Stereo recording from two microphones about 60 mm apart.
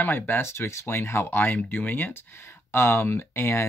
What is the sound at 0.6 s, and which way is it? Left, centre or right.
Speech, left.